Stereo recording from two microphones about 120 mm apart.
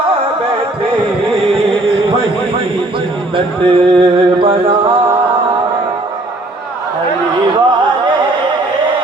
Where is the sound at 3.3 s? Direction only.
45° right (ahead or behind).